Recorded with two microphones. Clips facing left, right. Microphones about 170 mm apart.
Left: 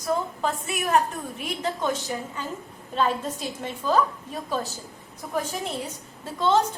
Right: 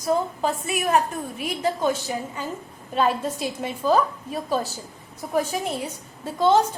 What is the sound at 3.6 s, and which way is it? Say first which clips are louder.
Speech: right 3 dB; 10° right (ahead or behind).